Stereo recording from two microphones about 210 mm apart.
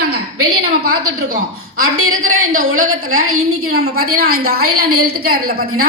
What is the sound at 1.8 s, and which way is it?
A woman's voice, 80° right.